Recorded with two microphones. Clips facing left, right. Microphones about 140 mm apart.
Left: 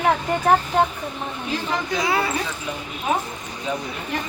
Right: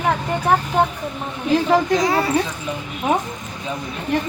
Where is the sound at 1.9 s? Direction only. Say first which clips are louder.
Right 4 dB; 40° right (ahead or behind).